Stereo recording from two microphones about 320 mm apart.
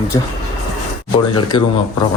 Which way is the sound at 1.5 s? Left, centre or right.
Centre.